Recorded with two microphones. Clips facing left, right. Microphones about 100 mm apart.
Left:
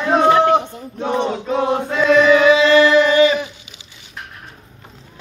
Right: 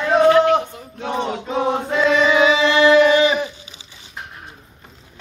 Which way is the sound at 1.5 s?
5° right (ahead or behind).